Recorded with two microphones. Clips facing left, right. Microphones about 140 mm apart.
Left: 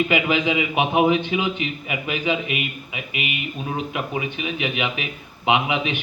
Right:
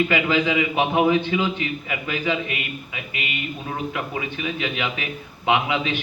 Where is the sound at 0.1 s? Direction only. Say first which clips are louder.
Even; 20° left (ahead or behind).